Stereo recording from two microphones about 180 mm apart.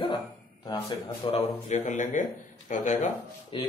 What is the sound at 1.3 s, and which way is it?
Speech, 40° left (ahead or behind).